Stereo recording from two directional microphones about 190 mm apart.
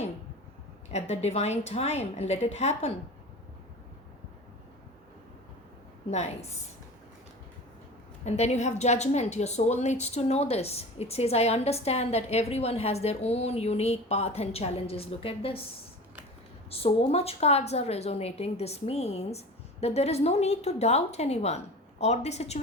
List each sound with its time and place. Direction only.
0.9 s a woman's voice: 35° left (ahead or behind)
6.1 s a woman's voice: 35° left (ahead or behind)
8.2 s a woman's voice: 40° left (ahead or behind)